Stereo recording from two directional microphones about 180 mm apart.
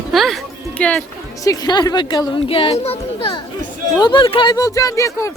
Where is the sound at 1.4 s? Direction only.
20° left (ahead or behind).